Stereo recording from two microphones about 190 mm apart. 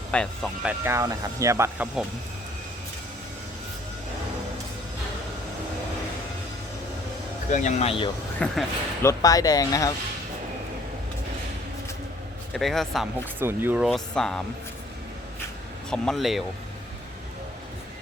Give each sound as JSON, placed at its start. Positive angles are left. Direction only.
{"t": 0.1, "sound": "speech", "side_deg": 5}
{"t": 0.6, "sound": "speech", "side_deg": -15}
{"t": 7.5, "sound": "speech", "side_deg": 35}
{"t": 8.4, "sound": "speech", "side_deg": 10}
{"t": 12.5, "sound": "speech", "side_deg": 0}
{"t": 13.4, "sound": "speech", "side_deg": -10}
{"t": 13.8, "sound": "speech", "side_deg": 0}
{"t": 15.9, "sound": "speech", "side_deg": 0}